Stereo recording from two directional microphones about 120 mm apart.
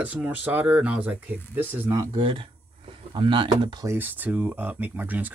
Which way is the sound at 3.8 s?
15° right (ahead or behind).